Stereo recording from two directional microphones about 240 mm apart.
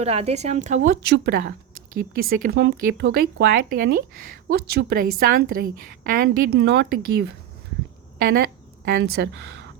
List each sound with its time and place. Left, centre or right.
0.0 s speech: right
8.2 s a sound: right
9.0 s speech: right